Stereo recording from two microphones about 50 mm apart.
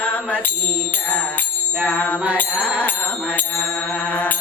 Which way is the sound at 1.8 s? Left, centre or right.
Left.